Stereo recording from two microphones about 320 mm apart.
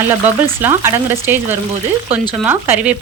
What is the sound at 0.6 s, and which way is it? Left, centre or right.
A woman's voice, centre.